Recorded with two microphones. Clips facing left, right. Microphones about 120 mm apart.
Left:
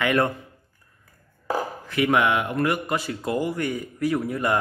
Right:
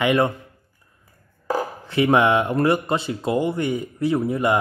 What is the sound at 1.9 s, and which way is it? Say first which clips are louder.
Speech: right 4 dB; 30° right (ahead or behind).